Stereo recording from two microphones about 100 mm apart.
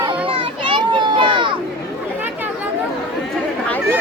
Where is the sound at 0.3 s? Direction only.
50° right (ahead or behind).